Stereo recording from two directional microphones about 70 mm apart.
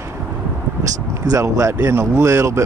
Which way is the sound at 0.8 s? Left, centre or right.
Right.